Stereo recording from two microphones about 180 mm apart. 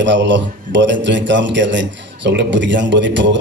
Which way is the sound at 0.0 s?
80° right.